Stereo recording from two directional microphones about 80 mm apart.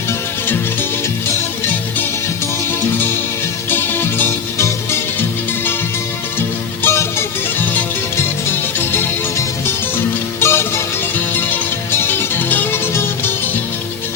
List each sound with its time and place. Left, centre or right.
3.7 s music: left
6.8 s music: left
8.8 s music: left
10.4 s music: left
11.9 s music: left